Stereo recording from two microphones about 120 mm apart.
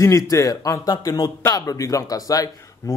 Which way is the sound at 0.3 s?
25° left (ahead or behind).